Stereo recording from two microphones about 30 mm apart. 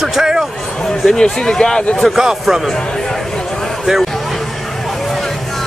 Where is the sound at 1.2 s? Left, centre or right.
Left.